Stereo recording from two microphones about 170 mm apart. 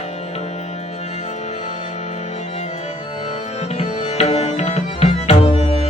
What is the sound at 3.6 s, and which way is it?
Tabla, 40° left (ahead or behind).